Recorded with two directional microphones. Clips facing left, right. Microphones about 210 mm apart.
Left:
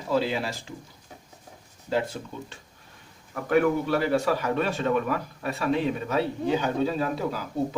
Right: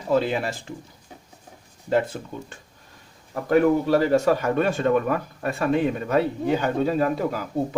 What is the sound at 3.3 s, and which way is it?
A man's voice, 35° right (ahead or behind).